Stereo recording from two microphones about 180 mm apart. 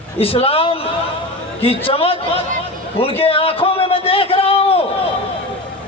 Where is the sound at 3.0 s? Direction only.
30° left (ahead or behind).